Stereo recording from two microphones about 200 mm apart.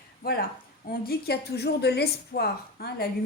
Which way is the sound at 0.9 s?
50° left (ahead or behind).